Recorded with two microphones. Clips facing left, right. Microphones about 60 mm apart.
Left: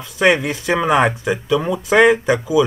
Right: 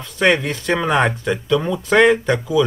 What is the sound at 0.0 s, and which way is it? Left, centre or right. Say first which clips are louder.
Speech: left 1 dB; centre.